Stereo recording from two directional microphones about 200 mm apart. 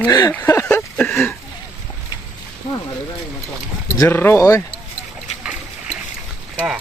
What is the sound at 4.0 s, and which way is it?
Speech, 10° left (ahead or behind).